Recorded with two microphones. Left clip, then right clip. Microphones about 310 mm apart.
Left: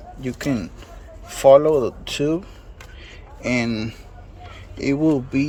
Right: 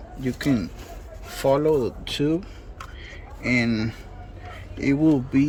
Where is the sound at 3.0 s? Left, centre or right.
Centre.